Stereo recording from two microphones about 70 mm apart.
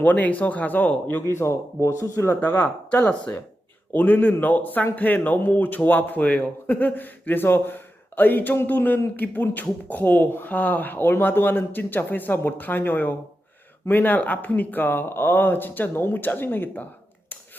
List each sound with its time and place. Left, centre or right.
0.0 s a man's voice: left
1.3 s speech: left
2.4 s a man's voice: left